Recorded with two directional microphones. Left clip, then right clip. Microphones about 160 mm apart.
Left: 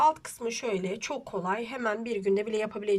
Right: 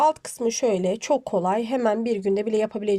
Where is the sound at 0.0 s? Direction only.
35° right (ahead or behind).